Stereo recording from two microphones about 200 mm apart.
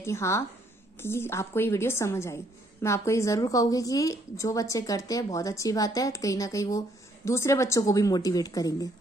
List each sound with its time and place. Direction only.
0.0 s a woman's voice: 15° left (ahead or behind)